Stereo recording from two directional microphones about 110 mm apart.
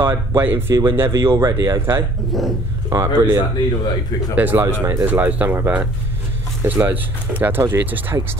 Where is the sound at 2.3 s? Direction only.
Centre (ahead or behind).